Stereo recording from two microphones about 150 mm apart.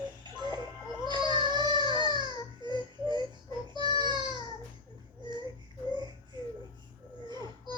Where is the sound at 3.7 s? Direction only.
30° right (ahead or behind).